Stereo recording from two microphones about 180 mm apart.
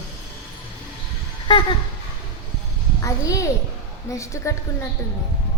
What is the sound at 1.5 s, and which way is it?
Music, 30° left (ahead or behind).